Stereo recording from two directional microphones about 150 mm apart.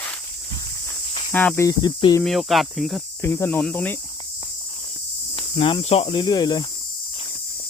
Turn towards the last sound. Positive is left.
turn(degrees=30)  # may be behind; listen again after turning